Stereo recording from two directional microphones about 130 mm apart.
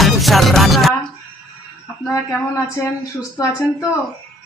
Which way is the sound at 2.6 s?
25° left (ahead or behind).